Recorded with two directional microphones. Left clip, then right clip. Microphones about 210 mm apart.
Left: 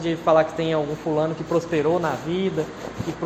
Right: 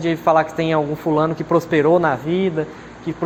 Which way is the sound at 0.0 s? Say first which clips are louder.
Right 3 dB; 45° right (ahead or behind).